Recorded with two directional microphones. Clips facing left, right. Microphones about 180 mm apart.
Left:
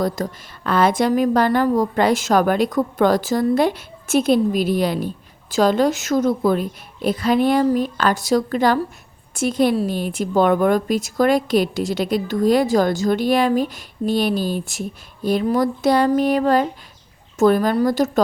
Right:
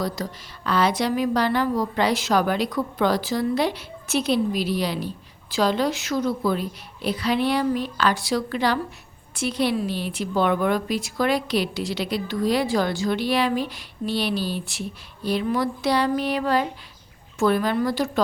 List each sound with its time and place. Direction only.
0.0 s a woman's voice: 50° left (ahead or behind)